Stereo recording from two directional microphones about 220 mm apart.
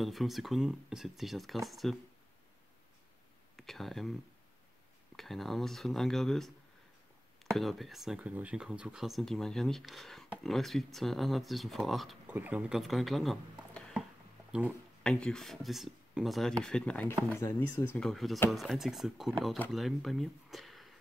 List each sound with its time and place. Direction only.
0.0 s speech: centre (ahead or behind)
3.5 s speech: centre (ahead or behind)
5.1 s speech: centre (ahead or behind)
7.5 s speech: centre (ahead or behind)